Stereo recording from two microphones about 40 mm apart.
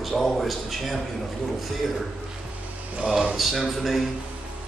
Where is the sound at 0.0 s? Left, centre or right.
Centre.